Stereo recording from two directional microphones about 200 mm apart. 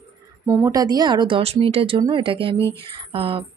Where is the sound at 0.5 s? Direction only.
15° right (ahead or behind).